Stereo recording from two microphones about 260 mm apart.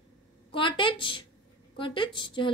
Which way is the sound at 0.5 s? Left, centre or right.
Centre.